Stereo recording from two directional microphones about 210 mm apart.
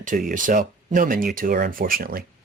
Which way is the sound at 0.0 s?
40° right (ahead or behind).